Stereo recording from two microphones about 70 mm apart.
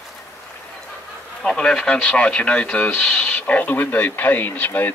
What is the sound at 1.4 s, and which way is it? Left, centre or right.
Speech, centre.